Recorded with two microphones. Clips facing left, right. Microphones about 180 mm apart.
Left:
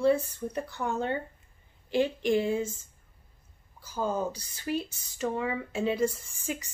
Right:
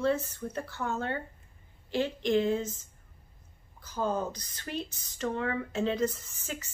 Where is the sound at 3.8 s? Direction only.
10° left (ahead or behind).